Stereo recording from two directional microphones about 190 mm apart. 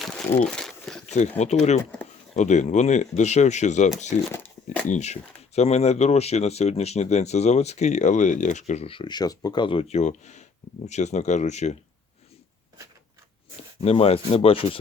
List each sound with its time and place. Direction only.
0.0 s crumpling: 5° left (ahead or behind)
1.4 s speech: 40° left (ahead or behind)
1.8 s a sound: 10° left (ahead or behind)
2.3 s speech: 40° left (ahead or behind)
4.3 s a sound: 10° left (ahead or behind)
4.9 s speech: 35° left (ahead or behind)
13.8 s speech: 30° left (ahead or behind)